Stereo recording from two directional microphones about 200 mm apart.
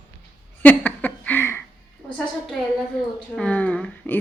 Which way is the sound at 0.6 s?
10° left (ahead or behind).